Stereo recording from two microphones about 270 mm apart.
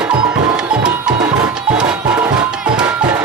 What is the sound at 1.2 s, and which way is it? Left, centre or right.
Music, centre.